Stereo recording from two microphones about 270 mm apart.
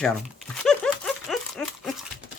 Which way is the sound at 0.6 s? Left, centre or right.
Centre.